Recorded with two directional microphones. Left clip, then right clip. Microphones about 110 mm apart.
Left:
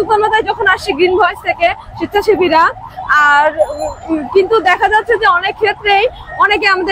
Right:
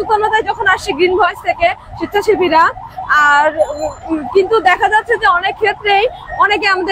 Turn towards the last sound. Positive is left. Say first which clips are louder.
# left 1 dB
turn(degrees=35)  # may be behind; listen again after turning